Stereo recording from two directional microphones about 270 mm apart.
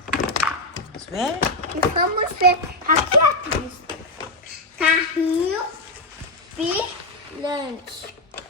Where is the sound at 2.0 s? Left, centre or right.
Right.